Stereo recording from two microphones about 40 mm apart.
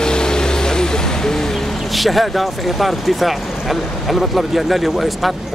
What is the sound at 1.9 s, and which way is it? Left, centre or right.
Speech, centre.